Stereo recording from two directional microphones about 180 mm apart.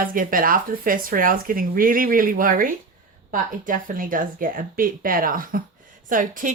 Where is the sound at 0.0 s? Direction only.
50° right (ahead or behind).